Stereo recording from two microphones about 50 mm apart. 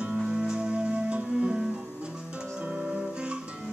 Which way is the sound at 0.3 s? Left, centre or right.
Centre.